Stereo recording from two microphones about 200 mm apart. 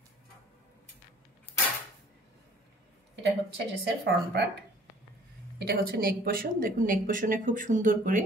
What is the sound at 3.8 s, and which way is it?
A woman's voice, 60° right (ahead or behind).